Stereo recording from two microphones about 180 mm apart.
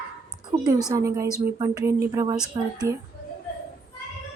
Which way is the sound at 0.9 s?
20° right (ahead or behind).